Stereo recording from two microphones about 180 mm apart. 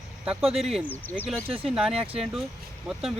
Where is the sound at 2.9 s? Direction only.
Centre (ahead or behind).